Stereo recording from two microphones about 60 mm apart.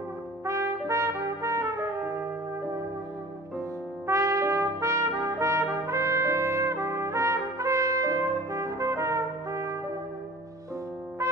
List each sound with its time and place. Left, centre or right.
0.5 s trumpet: right
4.1 s trumpet: right